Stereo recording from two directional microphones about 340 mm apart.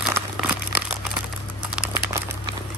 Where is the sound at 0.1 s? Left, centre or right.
Centre.